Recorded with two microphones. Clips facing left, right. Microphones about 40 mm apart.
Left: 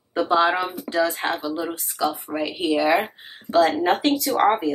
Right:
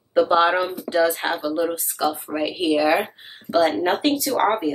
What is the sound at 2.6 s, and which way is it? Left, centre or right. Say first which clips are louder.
Speech: right 1 dB; centre.